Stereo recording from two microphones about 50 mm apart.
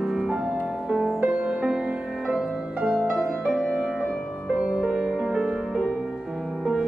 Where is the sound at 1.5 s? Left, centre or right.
Centre.